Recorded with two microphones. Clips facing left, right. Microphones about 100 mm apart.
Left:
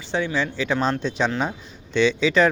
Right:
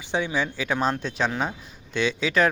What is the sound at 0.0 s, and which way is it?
Speech, 15° right (ahead or behind).